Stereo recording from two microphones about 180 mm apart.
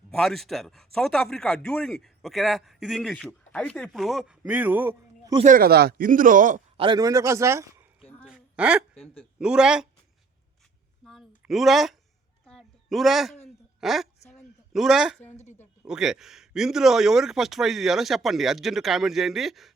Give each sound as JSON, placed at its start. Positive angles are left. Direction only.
{"t": 0.1, "sound": "a man's voice", "side_deg": 0}
{"t": 5.4, "sound": "speech", "side_deg": -50}
{"t": 6.7, "sound": "a man's voice", "side_deg": -25}
{"t": 8.3, "sound": "a sound", "side_deg": -5}
{"t": 9.4, "sound": "speech", "side_deg": -5}
{"t": 11.0, "sound": "a sound", "side_deg": 0}
{"t": 13.8, "sound": "speech", "side_deg": 0}
{"t": 15.3, "sound": "a woman's voice", "side_deg": 40}
{"t": 15.9, "sound": "speech", "side_deg": -5}